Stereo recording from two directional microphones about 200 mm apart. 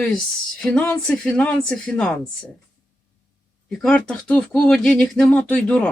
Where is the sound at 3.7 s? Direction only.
5° left (ahead or behind).